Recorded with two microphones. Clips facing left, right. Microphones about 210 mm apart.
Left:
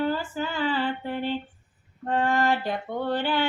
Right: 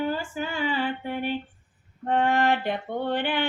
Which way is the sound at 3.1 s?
20° right (ahead or behind).